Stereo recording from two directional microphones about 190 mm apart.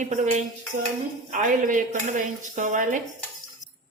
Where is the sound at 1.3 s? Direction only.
45° right (ahead or behind).